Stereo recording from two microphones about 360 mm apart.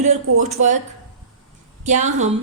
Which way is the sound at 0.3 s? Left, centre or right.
Centre.